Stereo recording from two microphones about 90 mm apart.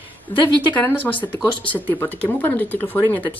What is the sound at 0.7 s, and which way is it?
Speech, 20° left (ahead or behind).